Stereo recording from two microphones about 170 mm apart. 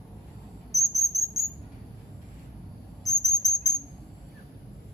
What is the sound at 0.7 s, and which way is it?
Cricket, 20° left (ahead or behind).